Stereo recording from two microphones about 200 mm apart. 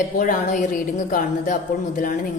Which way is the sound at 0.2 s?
40° left (ahead or behind).